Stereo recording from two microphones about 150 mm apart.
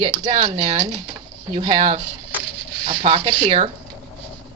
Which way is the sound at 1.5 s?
35° right (ahead or behind).